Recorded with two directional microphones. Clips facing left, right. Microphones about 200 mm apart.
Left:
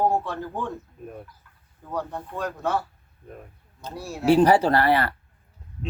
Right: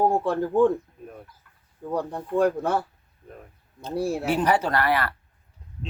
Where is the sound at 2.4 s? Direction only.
55° right (ahead or behind).